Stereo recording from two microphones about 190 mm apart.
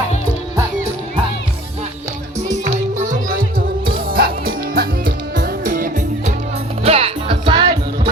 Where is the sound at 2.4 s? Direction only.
40° right (ahead or behind).